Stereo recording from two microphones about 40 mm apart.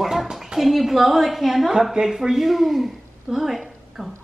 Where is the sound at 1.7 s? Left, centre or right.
Centre.